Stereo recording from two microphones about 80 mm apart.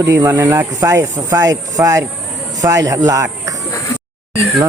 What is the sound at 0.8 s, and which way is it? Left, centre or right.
Speech, right.